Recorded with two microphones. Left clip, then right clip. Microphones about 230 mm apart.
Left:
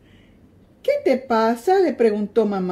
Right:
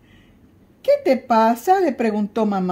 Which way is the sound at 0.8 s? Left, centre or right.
Right.